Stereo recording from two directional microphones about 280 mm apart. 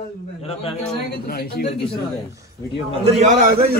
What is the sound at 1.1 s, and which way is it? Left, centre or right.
Speech, left.